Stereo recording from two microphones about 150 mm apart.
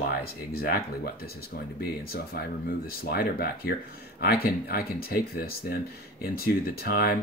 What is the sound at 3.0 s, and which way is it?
Speech, 90° left.